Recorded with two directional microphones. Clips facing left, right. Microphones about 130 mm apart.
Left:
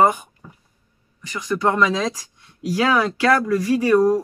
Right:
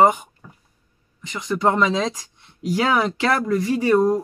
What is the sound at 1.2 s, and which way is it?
Speech, 25° right (ahead or behind).